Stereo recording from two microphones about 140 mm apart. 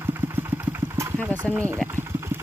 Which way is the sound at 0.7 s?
20° right (ahead or behind).